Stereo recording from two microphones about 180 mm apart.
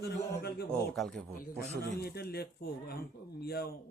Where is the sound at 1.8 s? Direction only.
60° left (ahead or behind).